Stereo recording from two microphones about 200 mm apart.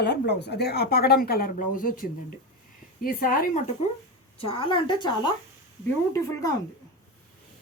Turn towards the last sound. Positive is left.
turn(degrees=15)  # may be behind; listen again after turning